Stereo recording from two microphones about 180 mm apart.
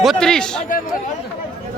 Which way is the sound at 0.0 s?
Centre (ahead or behind).